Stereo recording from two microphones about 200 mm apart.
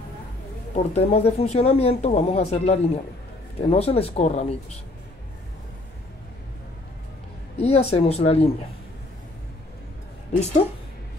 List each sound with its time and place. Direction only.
0.7 s speech: 30° left (ahead or behind)
7.5 s speech: 30° left (ahead or behind)